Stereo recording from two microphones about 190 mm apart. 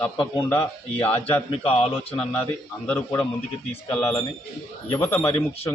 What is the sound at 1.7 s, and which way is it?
Speech, 30° left (ahead or behind).